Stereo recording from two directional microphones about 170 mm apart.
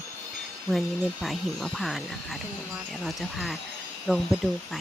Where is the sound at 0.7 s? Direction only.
Centre (ahead or behind).